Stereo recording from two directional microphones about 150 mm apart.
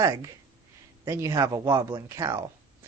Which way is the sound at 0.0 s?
20° right (ahead or behind).